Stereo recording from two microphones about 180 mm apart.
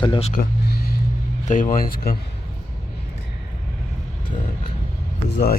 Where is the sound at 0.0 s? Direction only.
30° left (ahead or behind).